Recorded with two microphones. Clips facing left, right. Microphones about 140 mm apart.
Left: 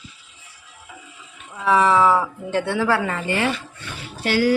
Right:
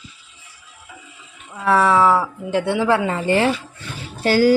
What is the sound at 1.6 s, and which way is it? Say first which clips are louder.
Speech: right 1 dB; centre (ahead or behind).